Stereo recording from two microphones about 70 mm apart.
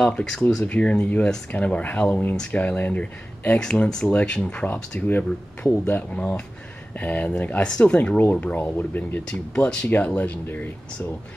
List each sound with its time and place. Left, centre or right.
0.0 s speech: centre
5.0 s speech: left
9.2 s speech: centre